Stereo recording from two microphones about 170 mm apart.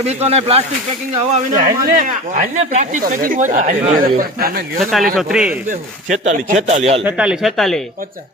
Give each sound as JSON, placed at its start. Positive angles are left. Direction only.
{"t": 0.0, "sound": "speech", "side_deg": -40}
{"t": 4.2, "sound": "speech", "side_deg": -60}
{"t": 4.8, "sound": "speech", "side_deg": 0}
{"t": 5.6, "sound": "speech", "side_deg": -45}
{"t": 7.0, "sound": "speech", "side_deg": -5}